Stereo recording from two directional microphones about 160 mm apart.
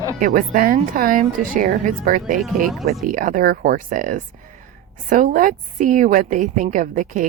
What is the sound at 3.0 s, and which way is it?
Speech, 55° right (ahead or behind).